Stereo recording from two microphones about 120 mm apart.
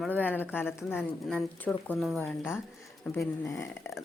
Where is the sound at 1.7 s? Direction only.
5° left (ahead or behind).